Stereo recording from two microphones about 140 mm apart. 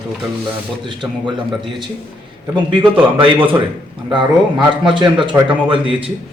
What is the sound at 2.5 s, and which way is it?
Speech, 35° right (ahead or behind).